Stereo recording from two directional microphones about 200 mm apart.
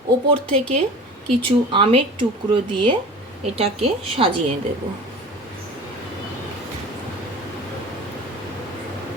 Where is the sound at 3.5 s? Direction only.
30° right (ahead or behind).